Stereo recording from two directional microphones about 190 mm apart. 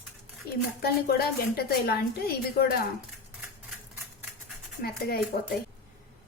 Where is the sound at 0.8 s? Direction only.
55° left (ahead or behind).